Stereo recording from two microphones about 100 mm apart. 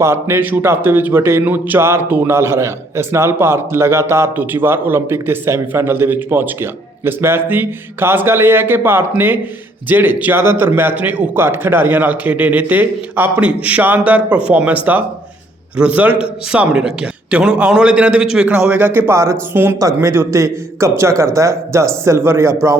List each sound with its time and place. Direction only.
0.0 s a man's voice: 25° right (ahead or behind)
18.9 s speech: 25° right (ahead or behind)